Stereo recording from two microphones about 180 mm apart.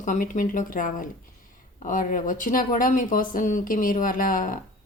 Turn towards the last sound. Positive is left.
turn(degrees=50)  # may be behind; listen again after turning